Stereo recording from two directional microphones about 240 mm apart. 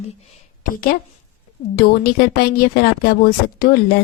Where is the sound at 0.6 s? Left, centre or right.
Left.